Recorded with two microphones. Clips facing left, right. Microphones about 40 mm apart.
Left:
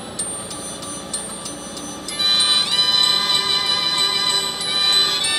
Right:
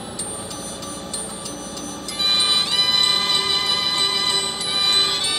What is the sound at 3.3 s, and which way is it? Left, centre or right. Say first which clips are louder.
Music: left 1 dB; centre.